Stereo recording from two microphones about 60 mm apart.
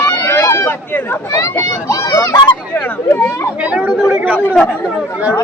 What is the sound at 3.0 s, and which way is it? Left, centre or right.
Chatter, left.